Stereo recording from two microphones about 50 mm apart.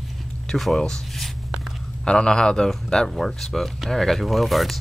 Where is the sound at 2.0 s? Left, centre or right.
Centre.